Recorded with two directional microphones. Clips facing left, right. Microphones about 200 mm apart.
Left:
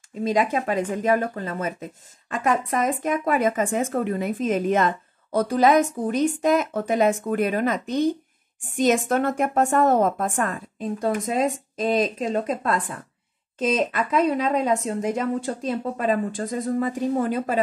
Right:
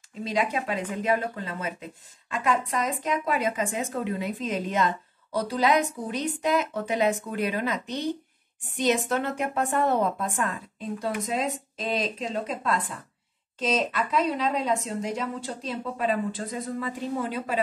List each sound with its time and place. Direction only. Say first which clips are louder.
0.2 s speech: left 5 dB; 50° left (ahead or behind)